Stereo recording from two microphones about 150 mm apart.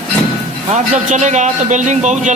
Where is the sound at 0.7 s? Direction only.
50° right (ahead or behind).